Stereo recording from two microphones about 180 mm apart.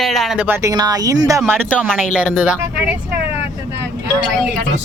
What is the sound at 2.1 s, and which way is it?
Speech, 5° right (ahead or behind).